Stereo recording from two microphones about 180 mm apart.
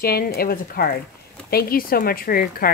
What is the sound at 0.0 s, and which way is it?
Speech, 55° left (ahead or behind).